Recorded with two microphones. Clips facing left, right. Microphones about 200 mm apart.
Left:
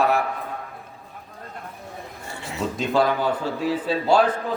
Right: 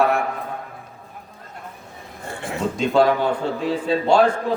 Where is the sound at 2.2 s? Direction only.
55° right (ahead or behind).